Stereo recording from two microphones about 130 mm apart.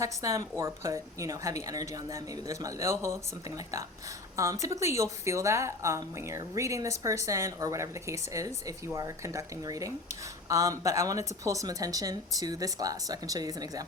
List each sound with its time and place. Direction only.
0.0 s a woman's voice: 25° right (ahead or behind)
4.4 s a woman's voice: 25° right (ahead or behind)